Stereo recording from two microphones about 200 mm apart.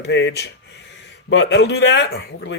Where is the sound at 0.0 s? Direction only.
60° left (ahead or behind).